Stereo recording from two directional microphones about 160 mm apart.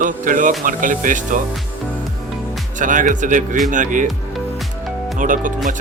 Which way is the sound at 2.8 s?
55° right (ahead or behind).